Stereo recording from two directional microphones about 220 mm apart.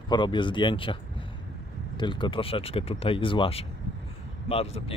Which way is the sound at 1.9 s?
20° left (ahead or behind).